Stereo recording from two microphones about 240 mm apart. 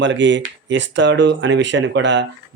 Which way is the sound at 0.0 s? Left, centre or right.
Right.